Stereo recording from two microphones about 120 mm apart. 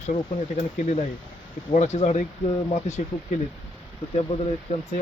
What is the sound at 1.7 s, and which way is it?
Speech, 80° left.